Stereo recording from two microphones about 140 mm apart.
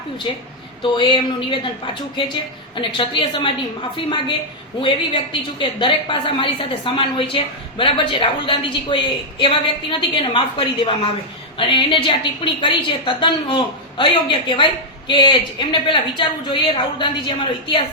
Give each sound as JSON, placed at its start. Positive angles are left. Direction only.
{"t": 0.8, "sound": "a woman's voice", "side_deg": 35}
{"t": 4.8, "sound": "a woman's voice", "side_deg": 35}